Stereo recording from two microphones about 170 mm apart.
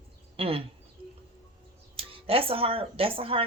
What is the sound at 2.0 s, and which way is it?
Speech, 35° right (ahead or behind).